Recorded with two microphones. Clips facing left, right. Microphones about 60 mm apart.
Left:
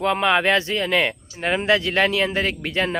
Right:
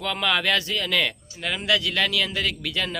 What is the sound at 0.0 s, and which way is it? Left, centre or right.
Speech, left.